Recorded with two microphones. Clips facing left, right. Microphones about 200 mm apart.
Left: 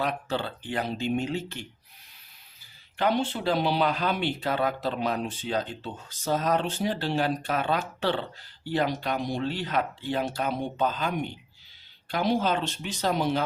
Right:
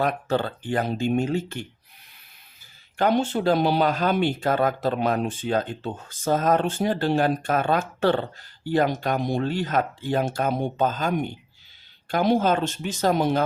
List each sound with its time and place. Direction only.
0.0 s speech: 50° right (ahead or behind)
3.0 s speech: 45° right (ahead or behind)